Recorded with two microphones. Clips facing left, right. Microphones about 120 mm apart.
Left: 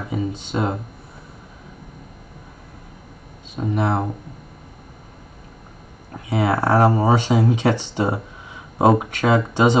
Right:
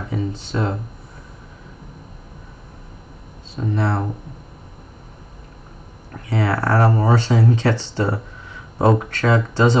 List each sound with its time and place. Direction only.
0.1 s speech: 15° left (ahead or behind)
3.5 s speech: 15° left (ahead or behind)
6.2 s speech: 15° left (ahead or behind)